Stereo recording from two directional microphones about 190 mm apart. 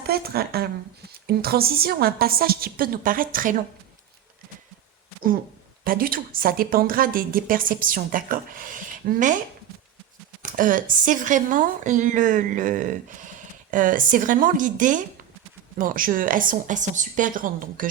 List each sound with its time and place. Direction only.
0.0 s a woman's voice: 55° right (ahead or behind)
5.8 s a woman's voice: 50° right (ahead or behind)
10.4 s a woman's voice: 45° right (ahead or behind)